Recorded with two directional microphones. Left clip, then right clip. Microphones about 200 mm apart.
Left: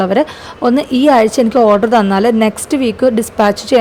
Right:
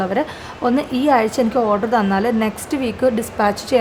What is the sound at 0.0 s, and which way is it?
A woman's voice, 35° left (ahead or behind).